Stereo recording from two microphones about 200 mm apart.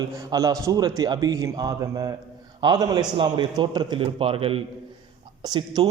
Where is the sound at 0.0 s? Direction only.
20° right (ahead or behind).